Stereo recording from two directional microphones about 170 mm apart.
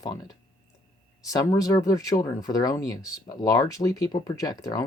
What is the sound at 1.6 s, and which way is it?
Speech, 20° left (ahead or behind).